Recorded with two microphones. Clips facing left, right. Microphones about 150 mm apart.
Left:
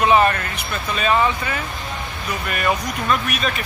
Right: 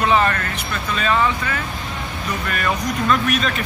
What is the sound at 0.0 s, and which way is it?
Speech, 15° left (ahead or behind).